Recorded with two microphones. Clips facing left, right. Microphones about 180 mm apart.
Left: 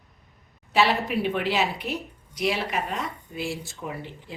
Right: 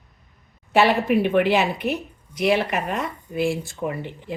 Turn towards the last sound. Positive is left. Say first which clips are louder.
# right 7 dB
turn(degrees=-60)  # may be behind; listen again after turning